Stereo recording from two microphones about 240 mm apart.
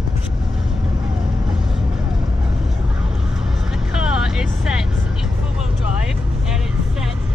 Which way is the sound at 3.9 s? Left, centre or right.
Centre.